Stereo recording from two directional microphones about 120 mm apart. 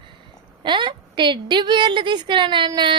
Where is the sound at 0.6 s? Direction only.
40° right (ahead or behind).